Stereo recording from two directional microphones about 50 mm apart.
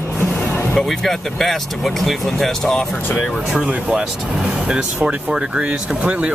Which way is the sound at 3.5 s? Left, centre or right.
Right.